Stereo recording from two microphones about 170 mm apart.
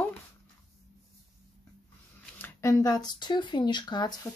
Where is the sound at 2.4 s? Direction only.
20° left (ahead or behind).